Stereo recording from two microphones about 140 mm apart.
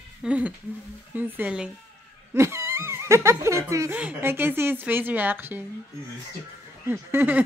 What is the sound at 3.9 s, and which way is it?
Speech, 15° right (ahead or behind).